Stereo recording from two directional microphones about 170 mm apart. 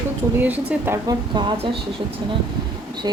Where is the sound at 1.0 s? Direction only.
25° right (ahead or behind).